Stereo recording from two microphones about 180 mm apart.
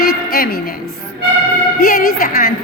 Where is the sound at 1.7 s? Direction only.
55° left (ahead or behind).